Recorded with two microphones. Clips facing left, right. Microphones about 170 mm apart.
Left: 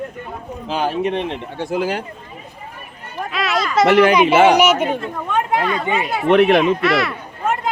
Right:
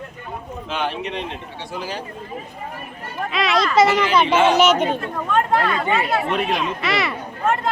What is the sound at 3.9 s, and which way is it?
Speech, 65° left (ahead or behind).